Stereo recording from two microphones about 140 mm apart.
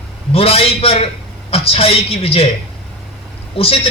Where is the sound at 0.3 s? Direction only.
45° left (ahead or behind).